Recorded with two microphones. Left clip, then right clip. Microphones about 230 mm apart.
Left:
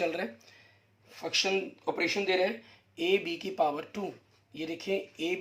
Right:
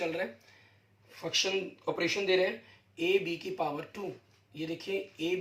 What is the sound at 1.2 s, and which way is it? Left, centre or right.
Speech, left.